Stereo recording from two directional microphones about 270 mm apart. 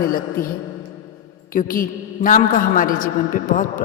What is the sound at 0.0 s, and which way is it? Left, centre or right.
Speech, left.